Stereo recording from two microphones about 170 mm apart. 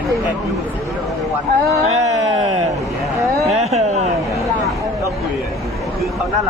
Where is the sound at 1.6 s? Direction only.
20° right (ahead or behind).